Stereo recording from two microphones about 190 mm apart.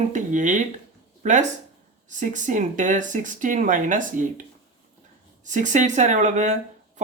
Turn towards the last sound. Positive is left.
turn(degrees=-40)  # may be behind; listen again after turning